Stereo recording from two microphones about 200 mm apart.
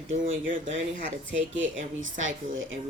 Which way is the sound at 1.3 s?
70° right (ahead or behind).